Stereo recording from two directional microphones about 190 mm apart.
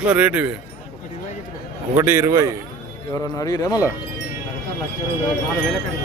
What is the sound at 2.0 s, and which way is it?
Speech, 15° right (ahead or behind).